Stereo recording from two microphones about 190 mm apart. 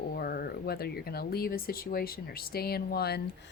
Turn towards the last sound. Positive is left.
turn(degrees=55)  # may be behind; listen again after turning